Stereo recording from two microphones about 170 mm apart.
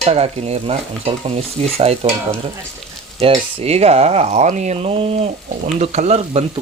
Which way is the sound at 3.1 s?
35° right (ahead or behind).